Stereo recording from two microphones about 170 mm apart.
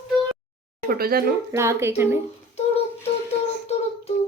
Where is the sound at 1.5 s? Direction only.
15° right (ahead or behind).